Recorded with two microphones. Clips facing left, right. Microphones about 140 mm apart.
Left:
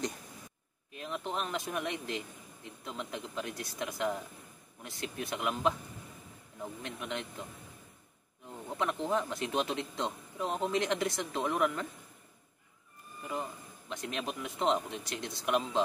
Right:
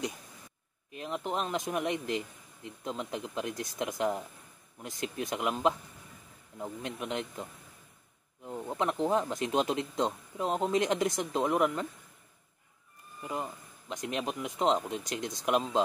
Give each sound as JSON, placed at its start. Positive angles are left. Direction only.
{"t": 0.9, "sound": "speech", "side_deg": -20}
{"t": 8.5, "sound": "speech", "side_deg": -25}
{"t": 13.2, "sound": "speech", "side_deg": -20}